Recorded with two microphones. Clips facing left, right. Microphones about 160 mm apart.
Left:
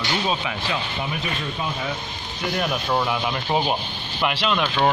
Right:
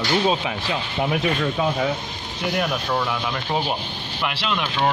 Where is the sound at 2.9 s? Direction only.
15° left (ahead or behind).